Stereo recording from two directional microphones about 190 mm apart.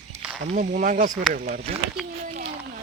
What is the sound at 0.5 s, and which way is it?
Speech, 40° right (ahead or behind).